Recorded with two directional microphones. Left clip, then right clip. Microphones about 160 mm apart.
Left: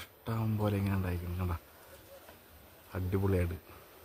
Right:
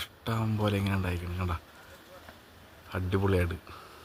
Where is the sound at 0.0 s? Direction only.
15° right (ahead or behind).